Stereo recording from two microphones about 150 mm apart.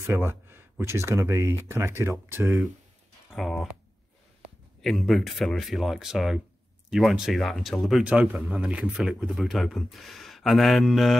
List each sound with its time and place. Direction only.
0.0 s speech: 15° right (ahead or behind)
2.4 s speech: centre (ahead or behind)
4.8 s speech: centre (ahead or behind)